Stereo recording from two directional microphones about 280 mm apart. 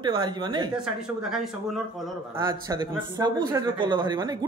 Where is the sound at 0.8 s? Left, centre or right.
Centre.